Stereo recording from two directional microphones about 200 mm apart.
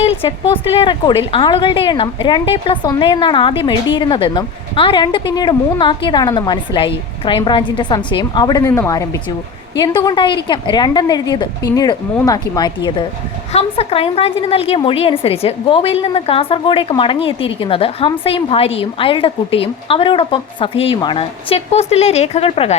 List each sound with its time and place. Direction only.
0.0 s a woman's voice: 30° left (ahead or behind)